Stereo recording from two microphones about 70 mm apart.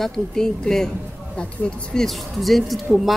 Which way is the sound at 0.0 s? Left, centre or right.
Centre.